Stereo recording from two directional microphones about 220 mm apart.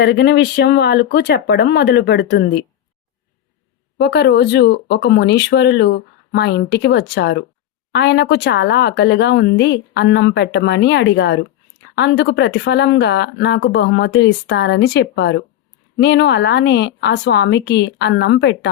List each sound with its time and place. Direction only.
0.0 s speech: 50° left (ahead or behind)
4.0 s speech: 50° left (ahead or behind)